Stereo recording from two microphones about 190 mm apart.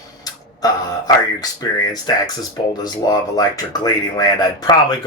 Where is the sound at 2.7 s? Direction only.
20° left (ahead or behind).